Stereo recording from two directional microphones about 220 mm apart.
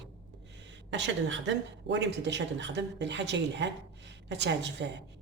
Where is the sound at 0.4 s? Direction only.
55° right (ahead or behind).